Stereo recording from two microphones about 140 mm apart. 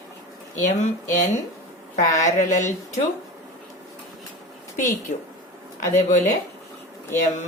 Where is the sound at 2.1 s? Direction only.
60° left (ahead or behind).